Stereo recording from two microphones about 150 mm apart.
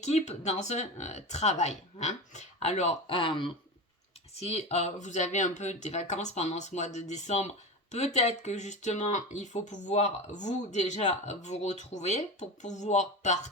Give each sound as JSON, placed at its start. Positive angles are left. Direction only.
{"t": 0.0, "sound": "speech", "side_deg": 50}
{"t": 4.4, "sound": "speech", "side_deg": 45}